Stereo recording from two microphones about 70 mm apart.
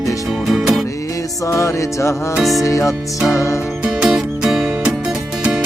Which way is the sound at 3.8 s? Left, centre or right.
Centre.